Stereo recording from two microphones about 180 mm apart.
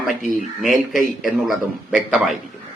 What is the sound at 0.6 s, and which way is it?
Speech, centre (ahead or behind).